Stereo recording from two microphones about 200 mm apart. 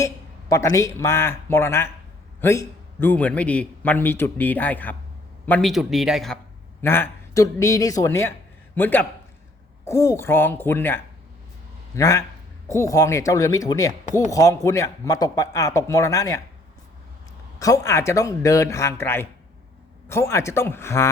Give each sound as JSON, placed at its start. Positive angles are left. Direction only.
{"t": 0.0, "sound": "a man's voice", "side_deg": 15}
{"t": 6.8, "sound": "a man's voice", "side_deg": 10}
{"t": 17.6, "sound": "a man's voice", "side_deg": 15}